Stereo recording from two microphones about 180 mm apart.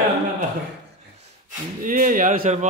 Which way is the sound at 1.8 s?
50° right (ahead or behind).